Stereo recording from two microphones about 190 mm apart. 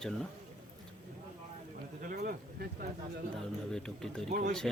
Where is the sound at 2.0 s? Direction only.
55° right (ahead or behind).